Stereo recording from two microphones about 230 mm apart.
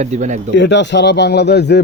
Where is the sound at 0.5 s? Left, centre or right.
Left.